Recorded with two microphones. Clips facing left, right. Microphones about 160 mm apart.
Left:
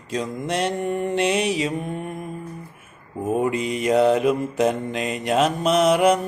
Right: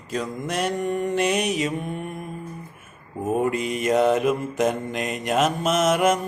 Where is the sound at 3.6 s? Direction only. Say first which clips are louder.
Left 2 dB; 30° left (ahead or behind).